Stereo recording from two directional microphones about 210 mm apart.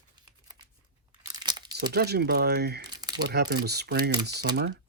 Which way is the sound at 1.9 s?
50° right (ahead or behind).